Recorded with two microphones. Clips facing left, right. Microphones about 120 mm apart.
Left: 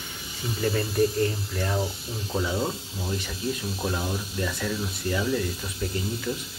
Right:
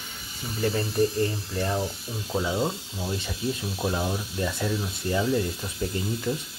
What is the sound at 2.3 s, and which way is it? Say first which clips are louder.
Speech: right 1 dB; 15° right (ahead or behind).